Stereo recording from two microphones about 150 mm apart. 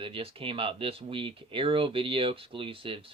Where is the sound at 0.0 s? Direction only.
35° right (ahead or behind).